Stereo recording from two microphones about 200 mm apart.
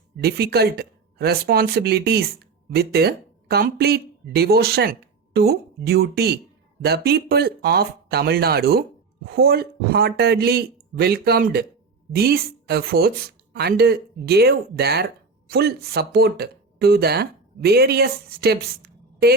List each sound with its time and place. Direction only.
0.2 s speech: 50° right (ahead or behind)